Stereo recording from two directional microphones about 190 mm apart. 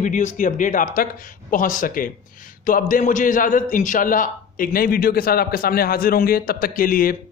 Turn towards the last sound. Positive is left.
turn(degrees=50)  # may be behind; listen again after turning